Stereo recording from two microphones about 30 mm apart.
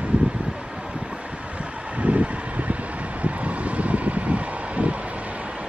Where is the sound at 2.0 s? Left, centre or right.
Right.